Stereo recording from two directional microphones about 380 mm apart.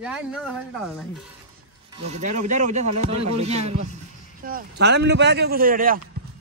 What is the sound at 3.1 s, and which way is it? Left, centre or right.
Speech, right.